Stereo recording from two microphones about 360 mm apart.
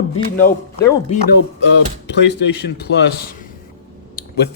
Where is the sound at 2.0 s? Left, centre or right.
Left.